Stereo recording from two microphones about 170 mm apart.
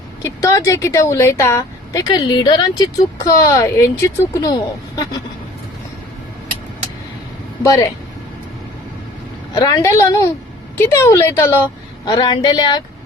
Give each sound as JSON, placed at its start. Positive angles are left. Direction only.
{"t": 0.2, "sound": "speech", "side_deg": 15}
{"t": 7.6, "sound": "speech", "side_deg": 20}
{"t": 9.6, "sound": "speech", "side_deg": 20}
{"t": 12.0, "sound": "speech", "side_deg": 25}